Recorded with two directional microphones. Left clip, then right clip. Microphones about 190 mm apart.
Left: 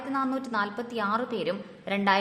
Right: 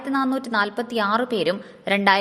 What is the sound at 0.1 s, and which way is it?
A woman's voice, 30° right (ahead or behind).